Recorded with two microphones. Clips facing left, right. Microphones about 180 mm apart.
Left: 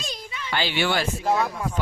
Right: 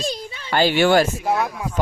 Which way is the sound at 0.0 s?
30° right (ahead or behind).